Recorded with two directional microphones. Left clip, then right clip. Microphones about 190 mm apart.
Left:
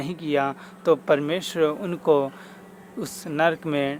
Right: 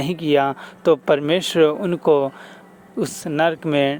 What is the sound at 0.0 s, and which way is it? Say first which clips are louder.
Speech: right 6 dB; 40° right (ahead or behind).